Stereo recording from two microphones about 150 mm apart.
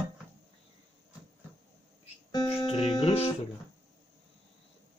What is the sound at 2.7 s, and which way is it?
Music, 30° left (ahead or behind).